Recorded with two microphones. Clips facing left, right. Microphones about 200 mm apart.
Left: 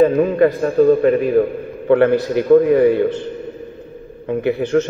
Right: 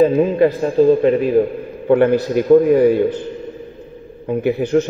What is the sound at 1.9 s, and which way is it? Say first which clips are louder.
A man's voice: even; 60° left (ahead or behind).